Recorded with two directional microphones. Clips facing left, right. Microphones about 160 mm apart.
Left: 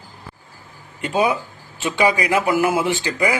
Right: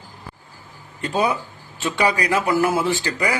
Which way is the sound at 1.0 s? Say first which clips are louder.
Left 2 dB; 20° left (ahead or behind).